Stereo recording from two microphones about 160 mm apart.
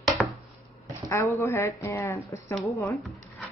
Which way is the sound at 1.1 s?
15° left (ahead or behind).